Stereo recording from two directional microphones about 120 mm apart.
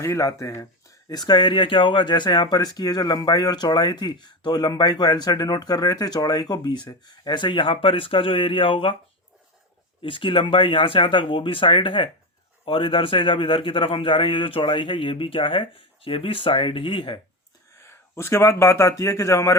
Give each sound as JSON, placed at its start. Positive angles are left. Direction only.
{"t": 0.0, "sound": "speech", "side_deg": 25}
{"t": 10.0, "sound": "a man's voice", "side_deg": 45}
{"t": 17.7, "sound": "speech", "side_deg": 20}